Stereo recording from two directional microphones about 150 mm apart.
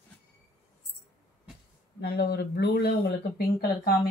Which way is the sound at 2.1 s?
90° left.